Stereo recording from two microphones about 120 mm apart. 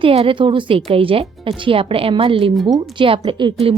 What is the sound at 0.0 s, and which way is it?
A woman's voice, 50° right (ahead or behind).